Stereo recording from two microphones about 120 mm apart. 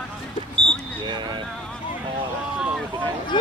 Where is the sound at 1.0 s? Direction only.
40° right (ahead or behind).